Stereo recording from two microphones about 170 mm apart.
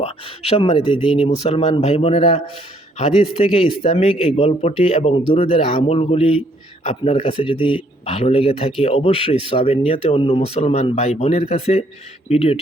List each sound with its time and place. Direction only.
0.0 s speech: 35° left (ahead or behind)